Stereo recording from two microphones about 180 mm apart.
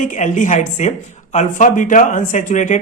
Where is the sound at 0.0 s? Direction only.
45° left (ahead or behind).